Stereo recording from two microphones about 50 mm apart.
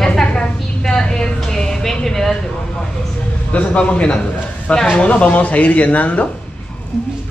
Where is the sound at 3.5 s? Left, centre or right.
Left.